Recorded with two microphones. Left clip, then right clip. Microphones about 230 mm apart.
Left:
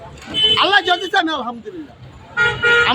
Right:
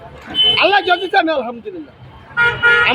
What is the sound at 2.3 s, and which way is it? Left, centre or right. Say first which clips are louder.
Speech: right 2 dB; centre.